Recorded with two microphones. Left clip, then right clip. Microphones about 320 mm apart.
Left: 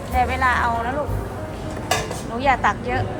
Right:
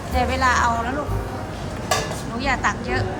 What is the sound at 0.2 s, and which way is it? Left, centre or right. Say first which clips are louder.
Speech: even; centre.